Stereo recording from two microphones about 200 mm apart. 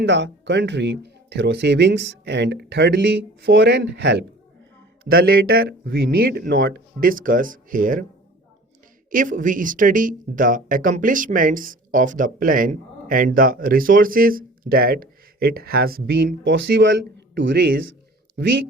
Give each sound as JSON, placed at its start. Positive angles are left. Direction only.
{"t": 0.0, "sound": "speech", "side_deg": -60}
{"t": 5.0, "sound": "speech", "side_deg": -50}
{"t": 9.0, "sound": "speech", "side_deg": -40}